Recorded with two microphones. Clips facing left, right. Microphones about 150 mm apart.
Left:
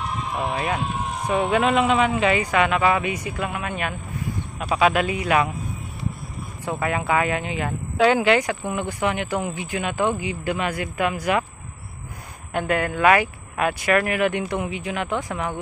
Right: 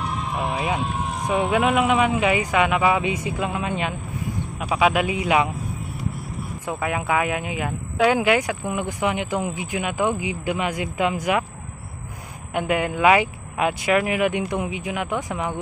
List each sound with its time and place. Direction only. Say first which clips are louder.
0.0 s speech: even; centre (ahead or behind); by 3.9 s 20° right (ahead or behind)
4.6 s speech: even; 10° right (ahead or behind)
6.6 s speech: left 2 dB; 10° right (ahead or behind)
12.5 s speech: even; 15° right (ahead or behind)